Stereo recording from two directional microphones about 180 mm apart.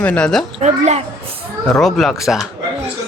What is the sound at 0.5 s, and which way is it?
Speech, 40° right (ahead or behind).